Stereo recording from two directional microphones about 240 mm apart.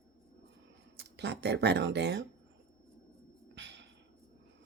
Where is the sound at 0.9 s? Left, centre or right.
Right.